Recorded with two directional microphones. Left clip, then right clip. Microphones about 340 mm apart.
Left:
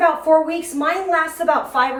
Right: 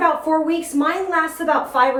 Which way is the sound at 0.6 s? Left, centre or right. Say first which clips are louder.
Even; centre.